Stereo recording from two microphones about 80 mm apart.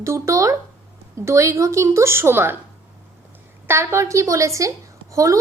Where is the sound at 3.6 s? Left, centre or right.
Right.